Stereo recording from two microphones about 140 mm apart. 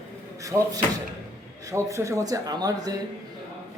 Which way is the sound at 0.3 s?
25° right (ahead or behind).